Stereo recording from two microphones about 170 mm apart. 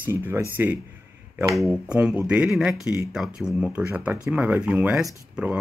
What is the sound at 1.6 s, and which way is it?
Speech, centre (ahead or behind).